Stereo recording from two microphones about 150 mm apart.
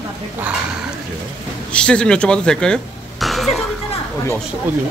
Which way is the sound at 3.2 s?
Centre (ahead or behind).